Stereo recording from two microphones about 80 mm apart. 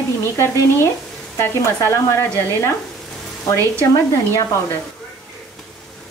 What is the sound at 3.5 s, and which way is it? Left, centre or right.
Frying, left.